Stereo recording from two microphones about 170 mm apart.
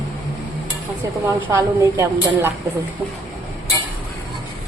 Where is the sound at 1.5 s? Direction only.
15° right (ahead or behind).